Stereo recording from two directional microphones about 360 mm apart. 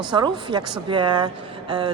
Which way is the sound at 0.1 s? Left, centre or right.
Centre.